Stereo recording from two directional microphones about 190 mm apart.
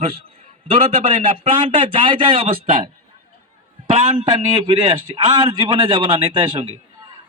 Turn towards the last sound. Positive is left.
turn(degrees=-25)  # may be behind; listen again after turning